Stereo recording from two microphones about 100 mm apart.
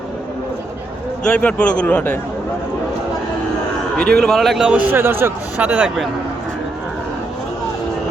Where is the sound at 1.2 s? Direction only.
10° left (ahead or behind).